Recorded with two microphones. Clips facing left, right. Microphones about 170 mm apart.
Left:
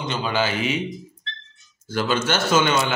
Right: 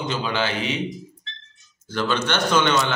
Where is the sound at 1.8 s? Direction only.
10° left (ahead or behind).